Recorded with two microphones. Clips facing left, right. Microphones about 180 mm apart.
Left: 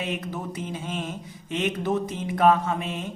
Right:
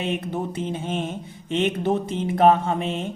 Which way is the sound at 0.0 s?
30° right (ahead or behind).